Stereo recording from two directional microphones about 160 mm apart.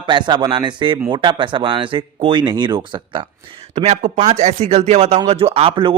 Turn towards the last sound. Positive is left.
turn(degrees=-35)  # may be behind; listen again after turning